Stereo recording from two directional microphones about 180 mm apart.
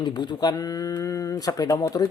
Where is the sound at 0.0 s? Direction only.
25° left (ahead or behind).